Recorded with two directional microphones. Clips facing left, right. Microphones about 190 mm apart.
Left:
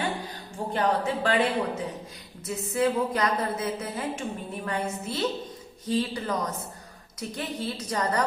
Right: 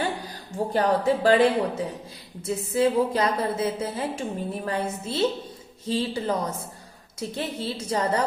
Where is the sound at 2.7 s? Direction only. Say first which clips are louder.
Right 3 dB; 30° right (ahead or behind).